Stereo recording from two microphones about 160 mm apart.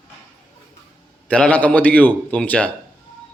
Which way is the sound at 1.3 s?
10° left (ahead or behind).